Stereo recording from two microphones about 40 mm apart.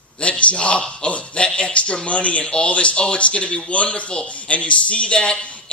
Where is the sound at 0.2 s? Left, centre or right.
Left.